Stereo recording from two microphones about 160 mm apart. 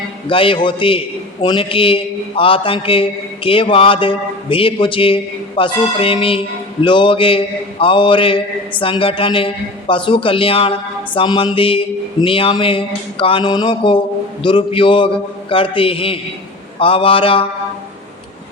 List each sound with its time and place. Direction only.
0.3 s a man's voice: 35° left (ahead or behind)